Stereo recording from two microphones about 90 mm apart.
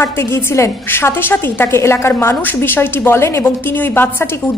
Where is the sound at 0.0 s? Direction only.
30° left (ahead or behind).